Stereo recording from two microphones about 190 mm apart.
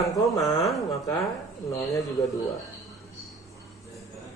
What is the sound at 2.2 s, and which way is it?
Speech, 20° left (ahead or behind).